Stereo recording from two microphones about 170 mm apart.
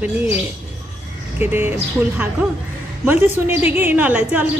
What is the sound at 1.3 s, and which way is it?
Speech, 10° right (ahead or behind).